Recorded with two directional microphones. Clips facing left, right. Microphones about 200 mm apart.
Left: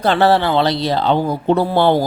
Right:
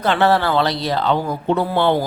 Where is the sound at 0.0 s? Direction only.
35° left (ahead or behind).